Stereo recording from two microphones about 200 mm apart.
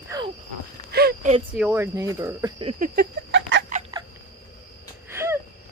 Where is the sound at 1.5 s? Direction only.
10° right (ahead or behind).